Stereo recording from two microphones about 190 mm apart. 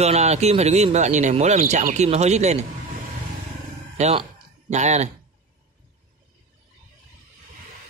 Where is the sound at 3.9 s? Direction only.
30° right (ahead or behind).